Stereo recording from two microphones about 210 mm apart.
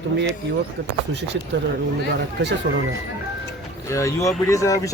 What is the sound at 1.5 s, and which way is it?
Speech, 55° right (ahead or behind).